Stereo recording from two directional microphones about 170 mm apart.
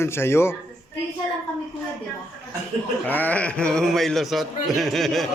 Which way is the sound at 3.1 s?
10° left (ahead or behind).